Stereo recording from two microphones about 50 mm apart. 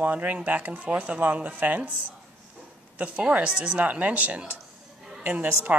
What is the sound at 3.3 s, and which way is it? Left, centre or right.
A woman's voice, right.